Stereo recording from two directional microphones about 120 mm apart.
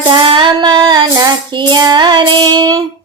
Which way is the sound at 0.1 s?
45° right (ahead or behind).